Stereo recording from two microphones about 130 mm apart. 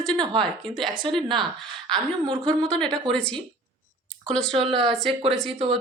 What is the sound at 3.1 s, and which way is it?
Speech, 5° left (ahead or behind).